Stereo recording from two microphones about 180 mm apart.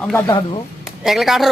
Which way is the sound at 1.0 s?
Centre (ahead or behind).